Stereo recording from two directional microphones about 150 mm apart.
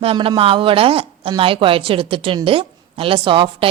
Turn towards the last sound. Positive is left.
turn(degrees=-35)  # may be behind; listen again after turning